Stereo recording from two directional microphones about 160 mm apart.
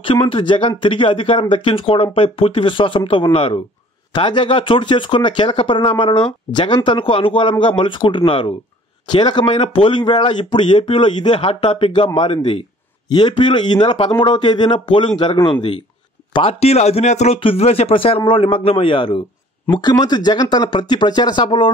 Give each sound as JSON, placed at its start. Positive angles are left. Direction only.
{"t": 0.0, "sound": "speech", "side_deg": 35}